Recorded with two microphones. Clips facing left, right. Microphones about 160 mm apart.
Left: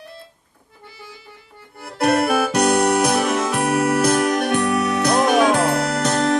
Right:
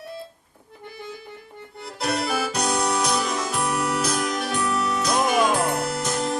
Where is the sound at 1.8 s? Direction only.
60° left (ahead or behind).